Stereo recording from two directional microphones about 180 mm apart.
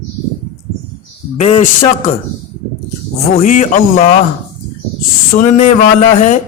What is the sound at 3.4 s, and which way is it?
Speech, 45° left (ahead or behind).